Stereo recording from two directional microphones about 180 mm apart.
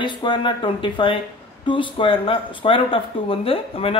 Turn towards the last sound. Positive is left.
turn(degrees=30)  # may be behind; listen again after turning